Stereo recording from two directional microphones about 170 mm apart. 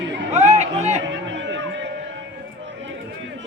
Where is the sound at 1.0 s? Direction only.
90° right.